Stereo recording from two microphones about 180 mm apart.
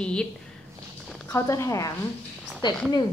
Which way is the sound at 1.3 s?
15° left (ahead or behind).